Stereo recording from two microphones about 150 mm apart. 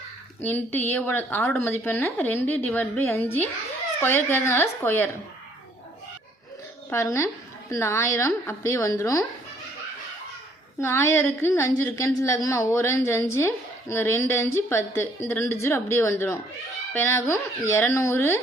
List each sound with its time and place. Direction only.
0.4 s a woman's voice: 15° left (ahead or behind)
6.9 s a woman's voice: 20° left (ahead or behind)
10.8 s a woman's voice: 15° left (ahead or behind)